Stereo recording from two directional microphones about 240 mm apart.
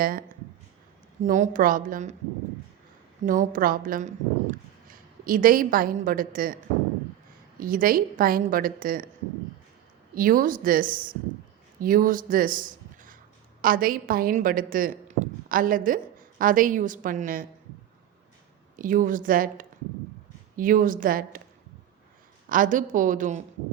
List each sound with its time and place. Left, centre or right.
0.0 s a woman's voice: right
3.2 s a woman's voice: right
7.6 s a woman's voice: right
10.2 s a woman's voice: right
18.8 s a woman's voice: right
22.4 s a woman's voice: right